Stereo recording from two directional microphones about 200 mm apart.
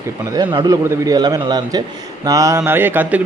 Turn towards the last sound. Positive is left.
turn(degrees=-10)  # may be behind; listen again after turning